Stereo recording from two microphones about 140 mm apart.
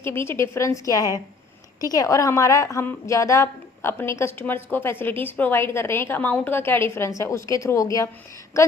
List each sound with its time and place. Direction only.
0.0 s a woman's voice: 15° left (ahead or behind)